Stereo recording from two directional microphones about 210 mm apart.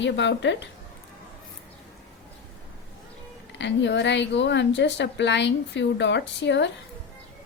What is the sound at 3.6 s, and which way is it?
A woman's voice, 55° left (ahead or behind).